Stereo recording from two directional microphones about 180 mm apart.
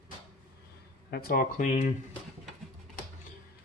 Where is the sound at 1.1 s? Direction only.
55° left (ahead or behind).